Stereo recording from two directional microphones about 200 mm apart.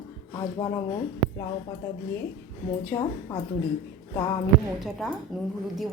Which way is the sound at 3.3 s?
15° left (ahead or behind).